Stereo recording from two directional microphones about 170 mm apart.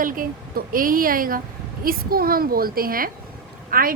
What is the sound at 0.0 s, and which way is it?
Speech, 55° right (ahead or behind).